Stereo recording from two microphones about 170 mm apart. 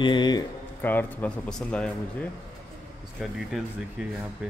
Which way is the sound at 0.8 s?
10° left (ahead or behind).